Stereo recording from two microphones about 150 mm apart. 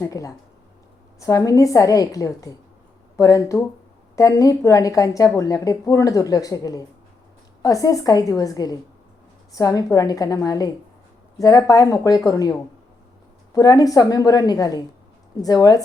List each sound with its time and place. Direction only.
0.0 s a woman's voice: 20° left (ahead or behind)